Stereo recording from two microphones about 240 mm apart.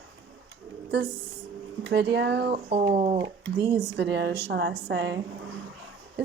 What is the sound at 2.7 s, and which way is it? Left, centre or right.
Speech, right.